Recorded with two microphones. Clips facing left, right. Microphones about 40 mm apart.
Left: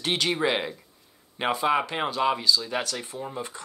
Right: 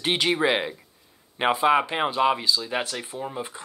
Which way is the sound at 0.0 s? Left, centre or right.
Centre.